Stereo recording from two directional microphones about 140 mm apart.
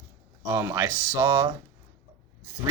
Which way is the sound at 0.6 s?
20° right (ahead or behind).